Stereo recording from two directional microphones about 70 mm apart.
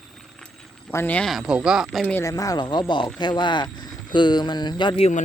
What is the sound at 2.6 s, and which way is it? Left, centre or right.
Speech, left.